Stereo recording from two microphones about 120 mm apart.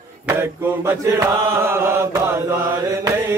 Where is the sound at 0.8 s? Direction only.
25° right (ahead or behind).